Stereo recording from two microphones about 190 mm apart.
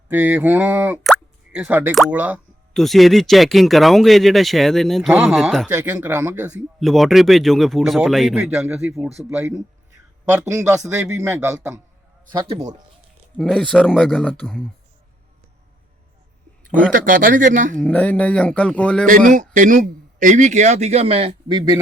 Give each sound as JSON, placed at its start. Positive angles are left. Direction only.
{"t": 0.1, "sound": "a man's voice", "side_deg": -10}
{"t": 10.2, "sound": "a man's voice", "side_deg": -15}
{"t": 12.3, "sound": "a man's voice", "side_deg": -30}
{"t": 13.3, "sound": "speech", "side_deg": 5}
{"t": 16.9, "sound": "speech", "side_deg": -45}
{"t": 17.8, "sound": "speech", "side_deg": 10}
{"t": 19.5, "sound": "a man's voice", "side_deg": -40}